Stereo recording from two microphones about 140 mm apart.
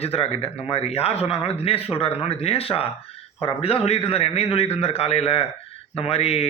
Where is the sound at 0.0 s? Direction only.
45° left (ahead or behind).